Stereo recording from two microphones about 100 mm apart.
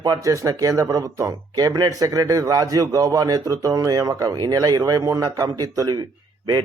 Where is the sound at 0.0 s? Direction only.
35° right (ahead or behind).